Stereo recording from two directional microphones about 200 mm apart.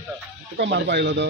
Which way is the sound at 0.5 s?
60° right (ahead or behind).